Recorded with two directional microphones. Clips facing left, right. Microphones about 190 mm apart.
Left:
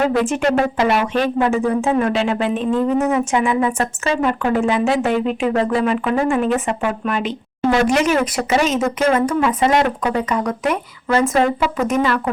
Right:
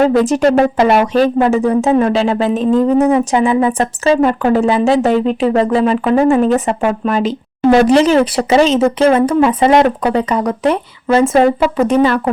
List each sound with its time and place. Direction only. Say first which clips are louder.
0.0 s speech: right 6 dB; 40° right (ahead or behind)